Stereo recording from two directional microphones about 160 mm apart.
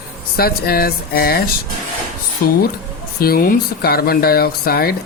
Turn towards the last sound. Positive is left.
turn(degrees=70)  # may be behind; listen again after turning